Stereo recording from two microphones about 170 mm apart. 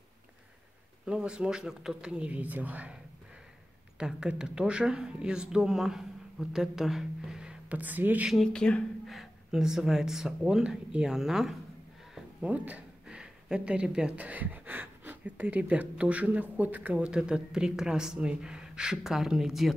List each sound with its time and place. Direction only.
1.0 s speech: 5° right (ahead or behind)
4.0 s speech: 5° right (ahead or behind)